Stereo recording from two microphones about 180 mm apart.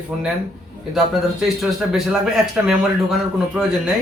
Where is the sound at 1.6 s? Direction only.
Centre (ahead or behind).